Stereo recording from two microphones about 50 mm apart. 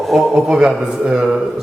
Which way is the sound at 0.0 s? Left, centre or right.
Centre.